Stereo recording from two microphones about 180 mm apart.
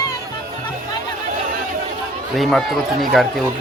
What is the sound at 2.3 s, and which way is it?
Speech, centre (ahead or behind).